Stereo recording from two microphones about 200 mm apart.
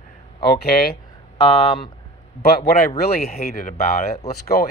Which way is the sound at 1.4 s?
25° left (ahead or behind).